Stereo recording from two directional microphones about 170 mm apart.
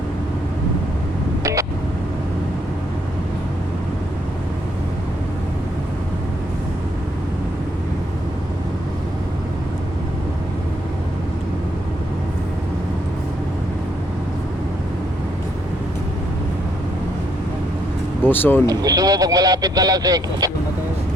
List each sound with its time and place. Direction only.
18.2 s speech: 10° left (ahead or behind)
18.7 s speech: 20° right (ahead or behind)